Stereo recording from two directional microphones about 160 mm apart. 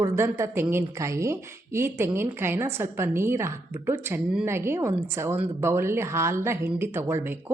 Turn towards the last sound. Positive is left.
turn(degrees=-15)  # may be behind; listen again after turning